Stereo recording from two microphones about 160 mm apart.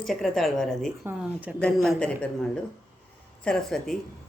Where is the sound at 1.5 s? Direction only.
5° left (ahead or behind).